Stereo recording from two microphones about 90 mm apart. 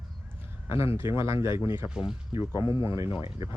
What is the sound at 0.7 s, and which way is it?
Speech, 90° left.